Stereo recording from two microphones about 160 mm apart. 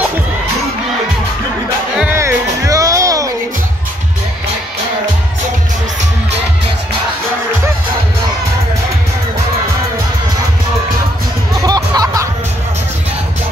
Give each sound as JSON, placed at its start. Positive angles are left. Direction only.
{"t": 2.0, "sound": "music", "side_deg": -15}
{"t": 11.5, "sound": "music", "side_deg": -25}